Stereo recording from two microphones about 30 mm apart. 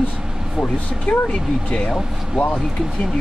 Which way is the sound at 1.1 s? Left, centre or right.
Left.